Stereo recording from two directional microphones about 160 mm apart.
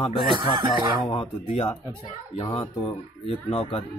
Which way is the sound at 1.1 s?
35° left (ahead or behind).